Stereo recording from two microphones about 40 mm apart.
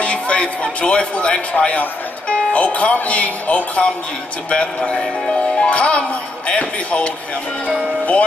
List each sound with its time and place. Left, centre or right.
0.0 s a man's voice: left